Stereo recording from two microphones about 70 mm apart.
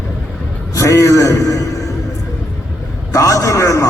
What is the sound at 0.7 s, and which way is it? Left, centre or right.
Speech, left.